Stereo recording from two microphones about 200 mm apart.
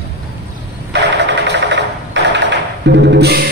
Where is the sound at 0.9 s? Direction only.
60° right (ahead or behind).